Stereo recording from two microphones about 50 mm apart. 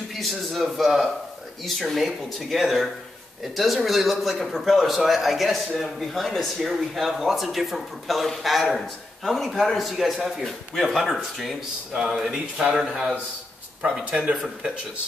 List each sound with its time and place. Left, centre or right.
0.1 s speech: centre
11.9 s speech: centre
13.8 s speech: centre